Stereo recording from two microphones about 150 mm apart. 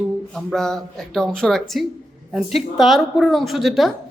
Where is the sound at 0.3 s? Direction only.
5° left (ahead or behind).